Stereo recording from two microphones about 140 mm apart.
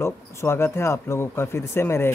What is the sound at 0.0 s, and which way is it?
Speech, 20° left (ahead or behind).